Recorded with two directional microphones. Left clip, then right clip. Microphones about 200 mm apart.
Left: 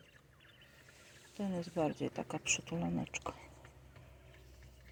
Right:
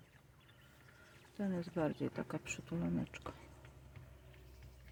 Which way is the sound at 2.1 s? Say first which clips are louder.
Left 6 dB; 45° right (ahead or behind).